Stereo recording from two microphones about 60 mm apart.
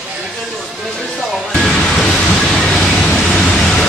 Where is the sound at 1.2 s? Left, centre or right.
Centre.